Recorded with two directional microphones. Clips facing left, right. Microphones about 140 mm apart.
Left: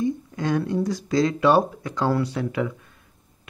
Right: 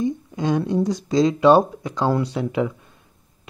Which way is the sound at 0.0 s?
20° right (ahead or behind).